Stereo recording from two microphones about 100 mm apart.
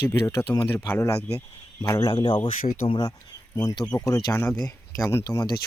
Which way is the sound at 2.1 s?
55° left (ahead or behind).